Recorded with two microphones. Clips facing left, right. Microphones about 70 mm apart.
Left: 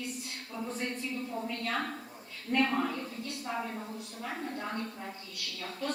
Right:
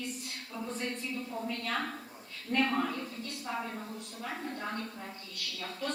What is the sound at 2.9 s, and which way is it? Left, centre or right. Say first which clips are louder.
Speech: left 1 dB; centre.